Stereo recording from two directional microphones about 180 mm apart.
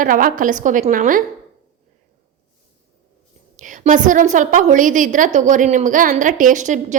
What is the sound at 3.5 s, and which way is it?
A woman's voice, 45° right (ahead or behind).